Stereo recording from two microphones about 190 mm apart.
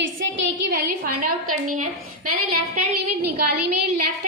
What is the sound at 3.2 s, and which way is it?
Speech, 60° right (ahead or behind).